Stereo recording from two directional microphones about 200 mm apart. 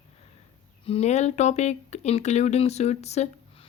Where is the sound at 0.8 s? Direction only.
30° left (ahead or behind).